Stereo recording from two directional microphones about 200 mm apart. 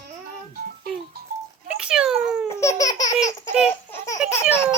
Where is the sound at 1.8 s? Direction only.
5° right (ahead or behind).